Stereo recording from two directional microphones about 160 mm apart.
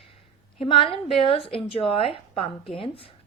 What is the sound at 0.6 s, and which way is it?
A woman's voice, 35° left (ahead or behind).